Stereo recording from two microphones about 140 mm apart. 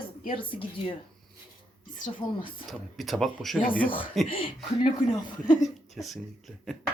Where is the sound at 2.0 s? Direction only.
35° left (ahead or behind).